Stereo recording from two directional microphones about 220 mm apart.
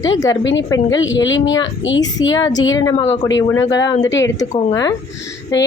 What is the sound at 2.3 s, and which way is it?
A woman's voice, 20° left (ahead or behind).